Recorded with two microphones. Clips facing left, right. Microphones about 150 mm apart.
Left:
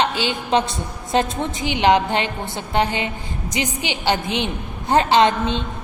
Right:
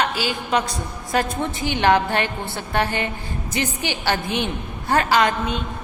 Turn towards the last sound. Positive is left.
turn(degrees=25)  # may be behind; listen again after turning